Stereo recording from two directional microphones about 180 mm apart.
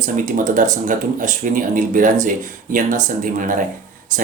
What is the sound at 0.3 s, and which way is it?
Speech, 45° right (ahead or behind).